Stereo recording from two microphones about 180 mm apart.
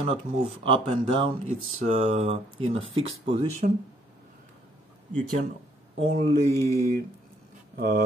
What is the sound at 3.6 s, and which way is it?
Speech, 45° right (ahead or behind).